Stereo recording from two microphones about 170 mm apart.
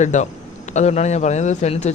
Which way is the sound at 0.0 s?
45° left (ahead or behind).